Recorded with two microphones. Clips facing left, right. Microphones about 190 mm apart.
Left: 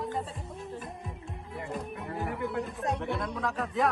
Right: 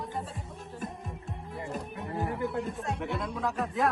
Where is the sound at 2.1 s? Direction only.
25° right (ahead or behind).